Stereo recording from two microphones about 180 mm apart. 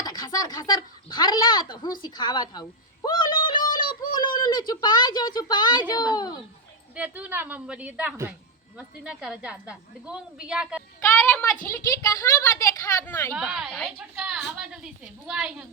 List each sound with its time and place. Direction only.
0.0 s speech: 20° left (ahead or behind)
6.9 s a woman's voice: 10° right (ahead or behind)
11.0 s a woman's voice: 10° left (ahead or behind)
11.7 s speech: 15° left (ahead or behind)
13.3 s a woman's voice: 5° right (ahead or behind)